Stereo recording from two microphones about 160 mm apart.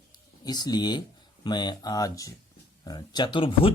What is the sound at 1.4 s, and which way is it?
Speech, 25° left (ahead or behind).